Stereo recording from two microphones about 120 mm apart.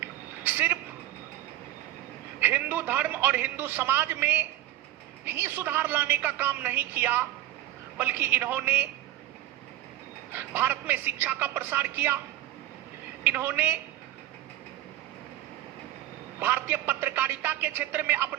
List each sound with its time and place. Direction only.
0.0 s a sound: 15° right (ahead or behind)
2.4 s a man's voice: 15° right (ahead or behind)
10.3 s a man's voice: 15° right (ahead or behind)
13.2 s a man's voice: 15° right (ahead or behind)
16.4 s a man's voice: 15° right (ahead or behind)